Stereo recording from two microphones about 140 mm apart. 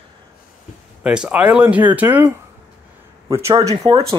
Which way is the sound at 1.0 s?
5° right (ahead or behind).